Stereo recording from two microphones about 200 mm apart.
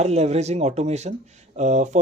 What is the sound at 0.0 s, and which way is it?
Speech, 35° right (ahead or behind).